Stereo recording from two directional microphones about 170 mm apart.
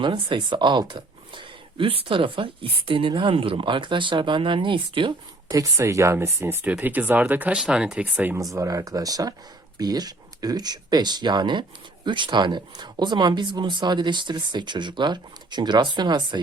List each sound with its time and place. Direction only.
0.0 s speech: 25° right (ahead or behind); by 8.4 s 10° right (ahead or behind)
8.5 s speech: 20° right (ahead or behind)